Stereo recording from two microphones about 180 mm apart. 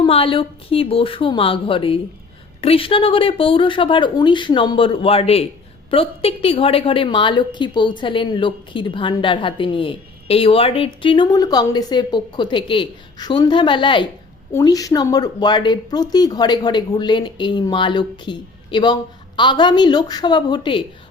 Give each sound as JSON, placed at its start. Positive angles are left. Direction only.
{"t": 0.0, "sound": "a woman's voice", "side_deg": 30}